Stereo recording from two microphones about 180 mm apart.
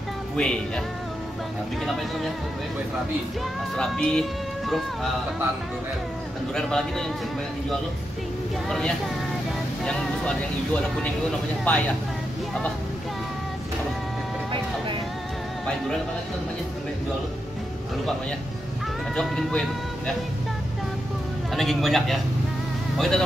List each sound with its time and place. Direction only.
0.4 s speech: 5° left (ahead or behind)
3.7 s speech: 5° left (ahead or behind)
6.5 s speech: 5° left (ahead or behind)
8.6 s speech: centre (ahead or behind)
19.1 s speech: 5° left (ahead or behind)
21.5 s speech: centre (ahead or behind)